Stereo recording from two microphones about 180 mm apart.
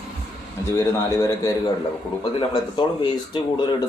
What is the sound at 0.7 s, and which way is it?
Speech, 15° left (ahead or behind).